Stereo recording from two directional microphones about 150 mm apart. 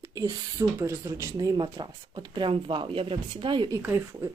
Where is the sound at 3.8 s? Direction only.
15° right (ahead or behind).